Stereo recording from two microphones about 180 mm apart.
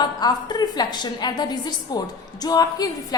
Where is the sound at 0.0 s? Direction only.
25° left (ahead or behind).